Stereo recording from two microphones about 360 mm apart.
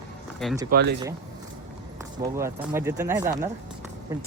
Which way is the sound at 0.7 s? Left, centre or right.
Right.